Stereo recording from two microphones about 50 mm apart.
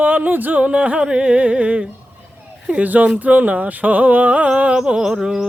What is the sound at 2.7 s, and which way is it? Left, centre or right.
Speech, right.